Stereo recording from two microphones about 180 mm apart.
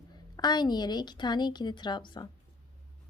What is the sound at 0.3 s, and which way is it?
A woman's voice, 25° left (ahead or behind).